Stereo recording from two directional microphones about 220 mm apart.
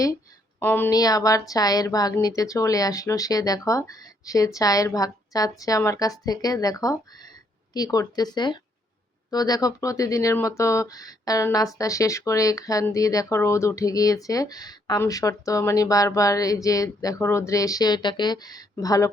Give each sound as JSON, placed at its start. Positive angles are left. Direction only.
{"t": 0.6, "sound": "speech", "side_deg": 10}